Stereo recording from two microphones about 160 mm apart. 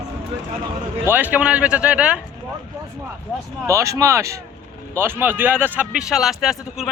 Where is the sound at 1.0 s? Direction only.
10° right (ahead or behind).